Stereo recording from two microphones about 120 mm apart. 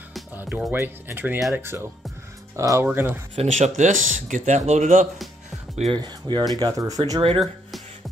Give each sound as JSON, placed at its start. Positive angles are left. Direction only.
{"t": 0.4, "sound": "speech", "side_deg": -15}
{"t": 3.4, "sound": "speech", "side_deg": -85}
{"t": 5.9, "sound": "speech", "side_deg": -35}